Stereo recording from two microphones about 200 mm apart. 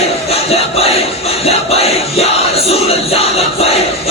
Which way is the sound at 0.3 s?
30° left (ahead or behind).